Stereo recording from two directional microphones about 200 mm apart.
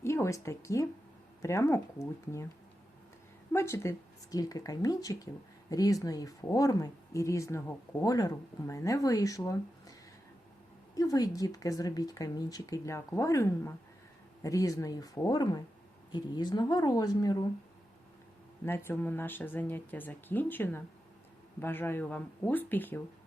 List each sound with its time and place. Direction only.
0.0 s speech: 15° left (ahead or behind)
3.5 s speech: 15° left (ahead or behind)
10.9 s speech: 15° left (ahead or behind)
18.6 s speech: 10° left (ahead or behind)